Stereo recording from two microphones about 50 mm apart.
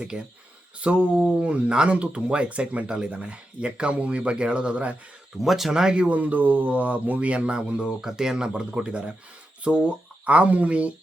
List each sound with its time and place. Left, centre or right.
0.0 s speech: centre
5.4 s speech: centre
6.1 s speech: right
10.2 s speech: right